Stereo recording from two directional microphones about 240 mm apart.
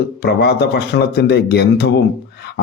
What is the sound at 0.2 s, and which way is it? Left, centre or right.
Speech, left.